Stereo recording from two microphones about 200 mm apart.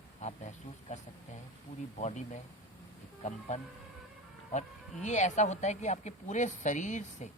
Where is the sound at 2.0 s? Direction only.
35° left (ahead or behind).